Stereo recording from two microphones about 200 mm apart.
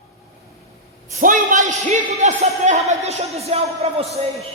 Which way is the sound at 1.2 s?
40° right (ahead or behind).